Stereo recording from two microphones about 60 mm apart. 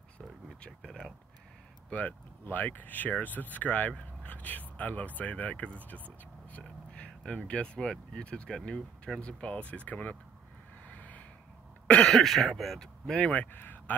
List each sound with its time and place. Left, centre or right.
1.9 s speech: left
10.9 s a sound: left
11.9 s speech: centre
13.2 s speech: left